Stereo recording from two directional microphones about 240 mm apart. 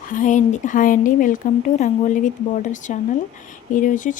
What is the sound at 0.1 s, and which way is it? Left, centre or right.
Speech, left.